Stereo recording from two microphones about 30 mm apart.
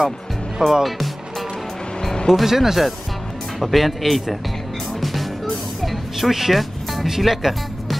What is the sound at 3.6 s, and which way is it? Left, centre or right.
Speech, centre.